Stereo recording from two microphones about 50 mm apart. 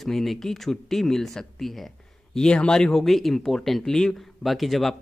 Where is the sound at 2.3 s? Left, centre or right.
Centre.